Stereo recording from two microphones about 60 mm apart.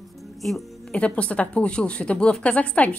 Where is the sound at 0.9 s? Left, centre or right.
Left.